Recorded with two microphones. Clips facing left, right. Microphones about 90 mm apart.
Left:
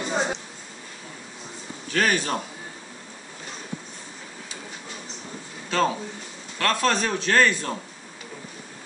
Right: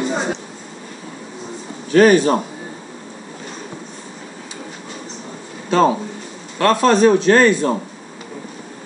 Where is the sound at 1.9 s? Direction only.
15° right (ahead or behind).